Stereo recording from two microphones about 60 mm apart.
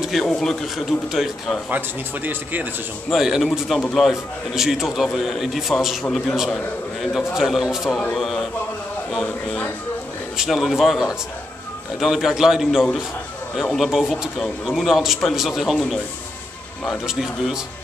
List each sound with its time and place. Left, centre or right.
0.0 s a sound: centre
0.4 s a man's voice: centre
1.7 s speech: right
3.1 s a man's voice: centre
8.1 s a man's voice: centre
10.3 s a man's voice: centre
17.0 s speech: centre